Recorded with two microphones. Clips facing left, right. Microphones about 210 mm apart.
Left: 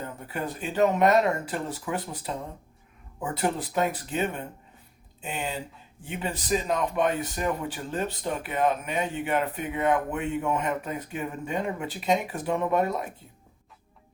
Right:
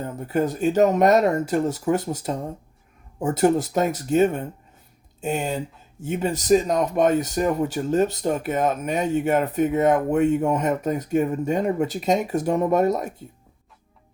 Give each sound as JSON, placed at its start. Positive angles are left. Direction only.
{"t": 0.0, "sound": "speech", "side_deg": -45}